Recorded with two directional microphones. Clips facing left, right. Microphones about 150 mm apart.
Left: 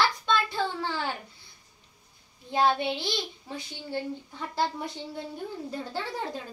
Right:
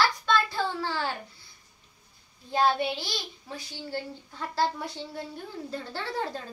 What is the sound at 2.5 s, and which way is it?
A child's voice, 20° left (ahead or behind).